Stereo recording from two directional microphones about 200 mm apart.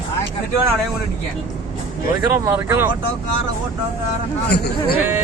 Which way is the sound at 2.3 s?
15° right (ahead or behind).